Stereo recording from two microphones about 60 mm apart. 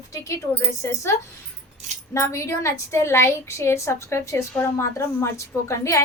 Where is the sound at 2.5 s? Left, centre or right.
Left.